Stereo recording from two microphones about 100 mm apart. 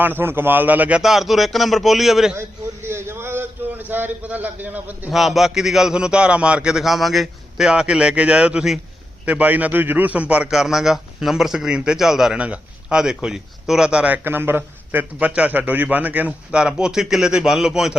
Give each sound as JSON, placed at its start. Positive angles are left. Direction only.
{"t": 0.0, "sound": "a man's voice", "side_deg": -20}
{"t": 2.3, "sound": "a man's voice", "side_deg": -25}
{"t": 5.1, "sound": "a man's voice", "side_deg": 0}